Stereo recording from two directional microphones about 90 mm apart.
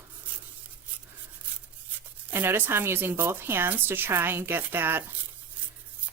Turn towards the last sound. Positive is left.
turn(degrees=-25)  # may be behind; listen again after turning